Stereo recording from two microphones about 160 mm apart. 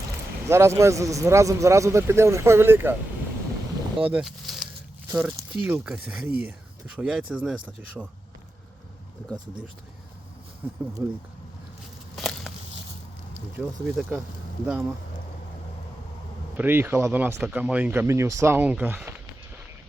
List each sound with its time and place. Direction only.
0.4 s a man's voice: 15° right (ahead or behind)
4.0 s a sound: 5° right (ahead or behind)
5.1 s a man's voice: 5° right (ahead or behind)
10.6 s a man's voice: 10° right (ahead or behind)
12.1 s walk: centre (ahead or behind)
13.6 s a man's voice: 10° right (ahead or behind)
16.6 s a man's voice: 15° right (ahead or behind)